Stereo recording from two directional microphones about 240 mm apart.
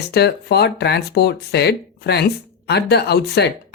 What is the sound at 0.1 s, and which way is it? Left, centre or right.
Speech, left.